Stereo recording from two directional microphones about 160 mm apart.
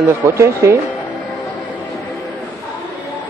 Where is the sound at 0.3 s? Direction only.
20° right (ahead or behind).